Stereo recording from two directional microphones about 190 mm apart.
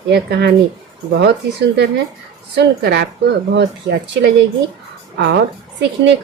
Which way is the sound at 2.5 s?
60° right (ahead or behind).